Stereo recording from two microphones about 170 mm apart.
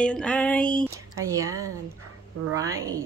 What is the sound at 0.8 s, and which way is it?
A woman's voice, 20° right (ahead or behind).